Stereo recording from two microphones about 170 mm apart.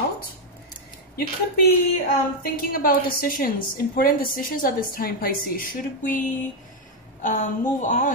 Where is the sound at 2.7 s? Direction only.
55° left (ahead or behind).